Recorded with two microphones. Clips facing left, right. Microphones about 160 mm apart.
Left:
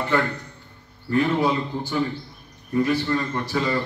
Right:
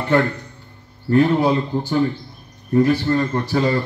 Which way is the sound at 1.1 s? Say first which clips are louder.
Right 5 dB; 35° right (ahead or behind).